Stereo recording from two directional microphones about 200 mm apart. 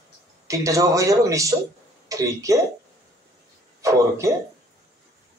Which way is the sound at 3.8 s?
15° right (ahead or behind).